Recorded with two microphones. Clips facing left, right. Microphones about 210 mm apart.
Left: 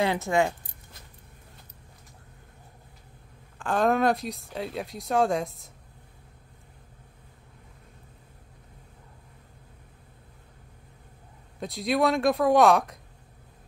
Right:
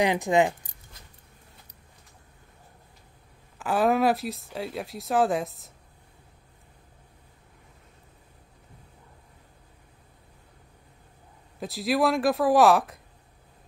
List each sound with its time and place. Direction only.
0.0 s speech: 15° right (ahead or behind)
3.5 s speech: 5° right (ahead or behind)
11.6 s speech: centre (ahead or behind)